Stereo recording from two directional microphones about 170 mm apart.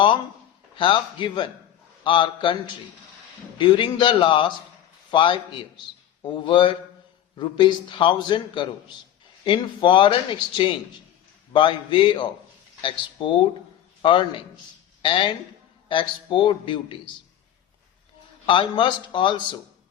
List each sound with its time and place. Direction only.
0.8 s a man's voice: 30° left (ahead or behind)
11.5 s a man's voice: 30° left (ahead or behind)
18.4 s a man's voice: 30° left (ahead or behind)